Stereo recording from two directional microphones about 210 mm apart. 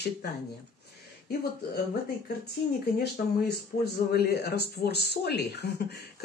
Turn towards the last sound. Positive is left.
turn(degrees=50)  # may be behind; listen again after turning